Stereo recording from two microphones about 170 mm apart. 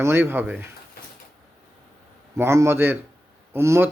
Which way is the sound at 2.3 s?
15° right (ahead or behind).